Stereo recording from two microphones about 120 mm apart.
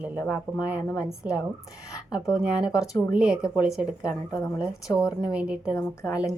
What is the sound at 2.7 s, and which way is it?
Speech, 30° left (ahead or behind).